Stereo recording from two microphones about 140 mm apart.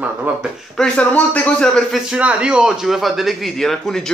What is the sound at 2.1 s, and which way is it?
Speech, 10° right (ahead or behind).